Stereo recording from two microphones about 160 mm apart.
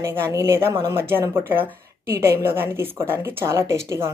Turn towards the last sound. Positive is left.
turn(degrees=-20)  # may be behind; listen again after turning